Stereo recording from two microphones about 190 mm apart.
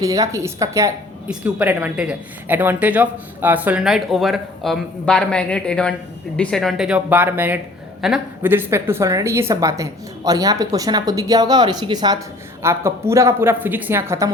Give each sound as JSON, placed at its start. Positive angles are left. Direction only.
{"t": 0.0, "sound": "a woman's voice", "side_deg": -15}